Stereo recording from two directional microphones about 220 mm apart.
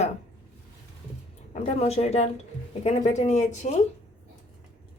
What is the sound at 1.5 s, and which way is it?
Speech, 30° left (ahead or behind).